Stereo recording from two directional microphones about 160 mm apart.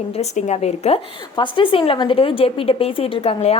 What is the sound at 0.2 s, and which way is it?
A woman's voice, 45° left (ahead or behind).